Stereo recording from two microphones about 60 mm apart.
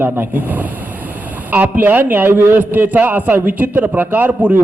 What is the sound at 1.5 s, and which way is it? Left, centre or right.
A man's voice, right.